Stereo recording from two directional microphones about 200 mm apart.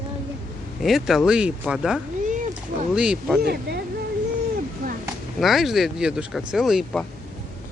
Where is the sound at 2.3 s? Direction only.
40° right (ahead or behind).